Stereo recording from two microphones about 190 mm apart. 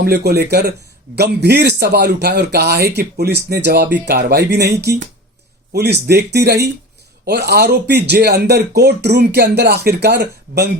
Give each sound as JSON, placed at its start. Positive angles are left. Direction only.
{"t": 0.0, "sound": "speech", "side_deg": -60}